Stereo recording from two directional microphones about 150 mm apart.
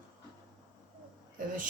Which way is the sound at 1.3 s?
65° right (ahead or behind).